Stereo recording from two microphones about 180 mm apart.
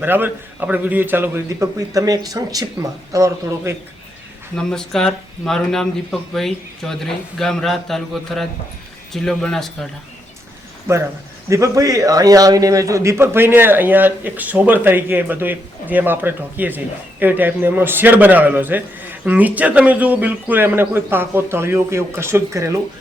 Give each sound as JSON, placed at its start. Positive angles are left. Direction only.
{"t": 0.0, "sound": "a man's voice", "side_deg": -10}
{"t": 4.5, "sound": "speech", "side_deg": 5}
{"t": 10.9, "sound": "a man's voice", "side_deg": -15}